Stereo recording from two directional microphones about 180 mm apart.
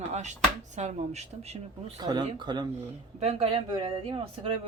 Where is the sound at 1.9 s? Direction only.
20° right (ahead or behind).